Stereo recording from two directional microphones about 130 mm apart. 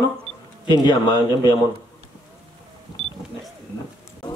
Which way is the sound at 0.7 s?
35° left (ahead or behind).